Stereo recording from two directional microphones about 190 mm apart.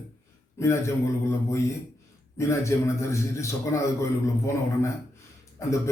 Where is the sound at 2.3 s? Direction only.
15° left (ahead or behind).